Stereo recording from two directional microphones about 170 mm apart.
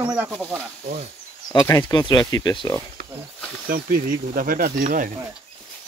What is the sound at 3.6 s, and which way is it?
Speech, 55° right (ahead or behind).